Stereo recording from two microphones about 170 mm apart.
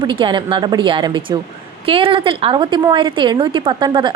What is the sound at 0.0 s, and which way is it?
A woman's voice, 25° right (ahead or behind).